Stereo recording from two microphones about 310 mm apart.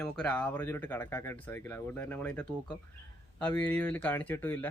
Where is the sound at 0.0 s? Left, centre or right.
Centre.